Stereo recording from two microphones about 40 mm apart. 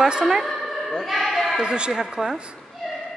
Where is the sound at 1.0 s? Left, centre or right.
Centre.